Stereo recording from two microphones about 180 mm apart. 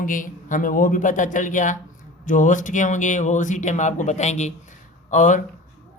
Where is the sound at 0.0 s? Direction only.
50° left (ahead or behind).